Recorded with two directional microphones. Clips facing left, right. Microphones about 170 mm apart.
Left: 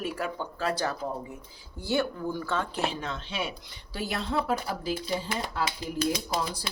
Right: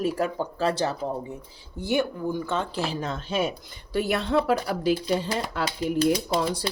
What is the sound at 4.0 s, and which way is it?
Speech, 65° right (ahead or behind).